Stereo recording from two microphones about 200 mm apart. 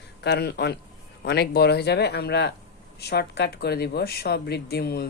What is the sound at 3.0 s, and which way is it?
Owl, 55° left (ahead or behind).